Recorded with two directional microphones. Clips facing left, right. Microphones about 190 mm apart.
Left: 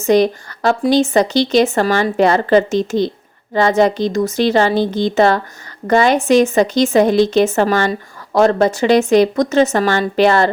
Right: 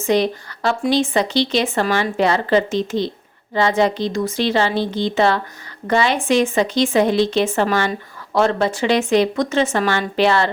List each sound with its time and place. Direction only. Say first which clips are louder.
0.0 s a woman's voice: left 5 dB; 45° left (ahead or behind)